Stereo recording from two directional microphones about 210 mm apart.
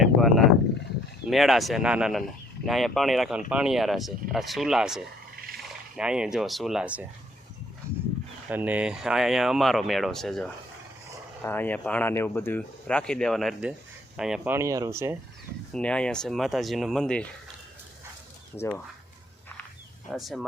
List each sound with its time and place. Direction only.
0.0 s a sound: centre (ahead or behind)
1.3 s speech: centre (ahead or behind)
8.4 s speech: 10° right (ahead or behind)
15.7 s speech: 5° left (ahead or behind)
20.1 s speech: centre (ahead or behind)